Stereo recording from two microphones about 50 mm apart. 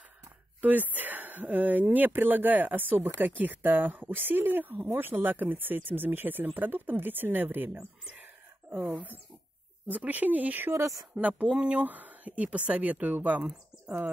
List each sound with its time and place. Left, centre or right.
0.6 s speech: right
8.1 s a sound: right
9.8 s speech: right
10.7 s a woman's voice: right
11.1 s speech: right